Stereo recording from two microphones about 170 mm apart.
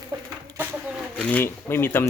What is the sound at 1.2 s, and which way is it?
Speech, 10° left (ahead or behind).